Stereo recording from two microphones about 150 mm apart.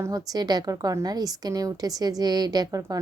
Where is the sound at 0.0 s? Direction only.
25° right (ahead or behind).